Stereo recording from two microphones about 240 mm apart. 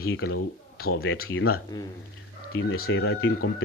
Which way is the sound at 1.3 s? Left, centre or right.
Left.